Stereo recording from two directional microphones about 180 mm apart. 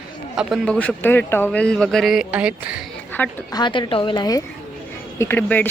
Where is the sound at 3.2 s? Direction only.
10° left (ahead or behind).